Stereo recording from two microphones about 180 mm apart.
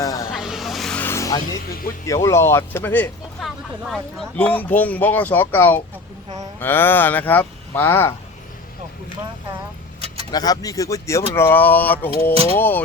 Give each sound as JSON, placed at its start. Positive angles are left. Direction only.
{"t": 0.0, "sound": "vehicle", "side_deg": 20}
{"t": 0.3, "sound": "vehicle", "side_deg": 0}
{"t": 2.0, "sound": "speech", "side_deg": 15}
{"t": 10.3, "sound": "speech", "side_deg": 20}